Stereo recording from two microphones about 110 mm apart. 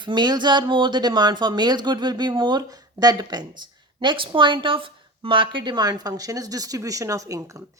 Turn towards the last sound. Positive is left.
turn(degrees=-30)  # may be behind; listen again after turning